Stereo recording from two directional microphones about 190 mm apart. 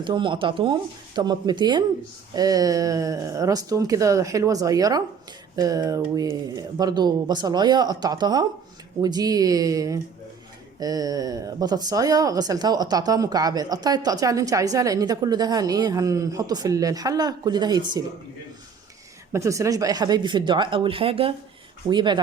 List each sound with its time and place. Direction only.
0.0 s speech: 25° right (ahead or behind)
19.3 s speech: 15° right (ahead or behind)